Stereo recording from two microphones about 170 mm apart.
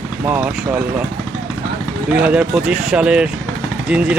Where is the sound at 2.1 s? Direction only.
5° right (ahead or behind).